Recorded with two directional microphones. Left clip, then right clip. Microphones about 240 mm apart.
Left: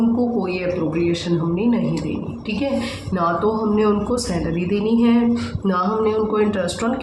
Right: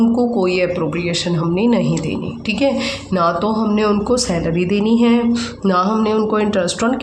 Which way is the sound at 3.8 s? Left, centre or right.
Right.